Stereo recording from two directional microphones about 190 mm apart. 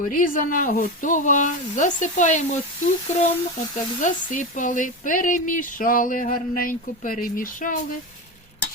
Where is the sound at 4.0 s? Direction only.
45° left (ahead or behind).